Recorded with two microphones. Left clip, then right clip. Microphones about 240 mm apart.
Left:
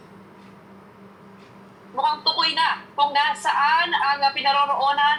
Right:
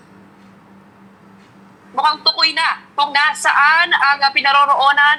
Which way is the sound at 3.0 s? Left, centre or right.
Right.